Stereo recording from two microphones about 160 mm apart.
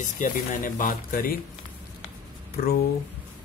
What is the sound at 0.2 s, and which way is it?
Speech, 60° left (ahead or behind).